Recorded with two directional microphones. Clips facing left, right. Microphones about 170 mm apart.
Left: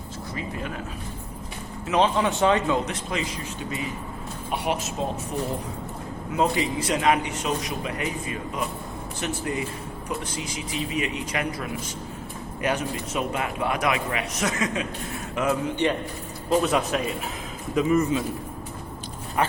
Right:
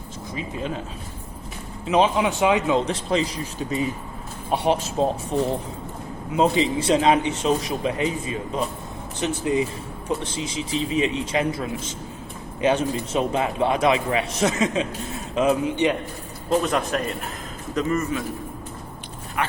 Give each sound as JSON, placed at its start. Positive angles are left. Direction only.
{"t": 0.3, "sound": "a man's voice", "side_deg": -20}
{"t": 1.9, "sound": "speech", "side_deg": -15}
{"t": 2.8, "sound": "a man's voice", "side_deg": -30}
{"t": 16.5, "sound": "speech", "side_deg": 5}
{"t": 19.4, "sound": "speech", "side_deg": 30}